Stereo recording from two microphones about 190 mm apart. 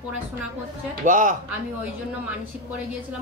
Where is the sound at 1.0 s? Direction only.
45° right (ahead or behind).